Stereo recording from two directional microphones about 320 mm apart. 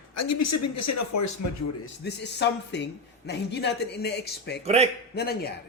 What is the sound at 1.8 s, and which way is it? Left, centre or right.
Speech, left.